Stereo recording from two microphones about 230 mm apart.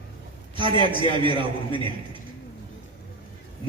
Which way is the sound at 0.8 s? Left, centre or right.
Right.